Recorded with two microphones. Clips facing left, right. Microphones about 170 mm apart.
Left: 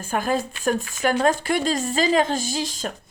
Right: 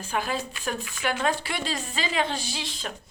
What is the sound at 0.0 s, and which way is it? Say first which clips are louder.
Speech: left 6 dB; 45° left (ahead or behind).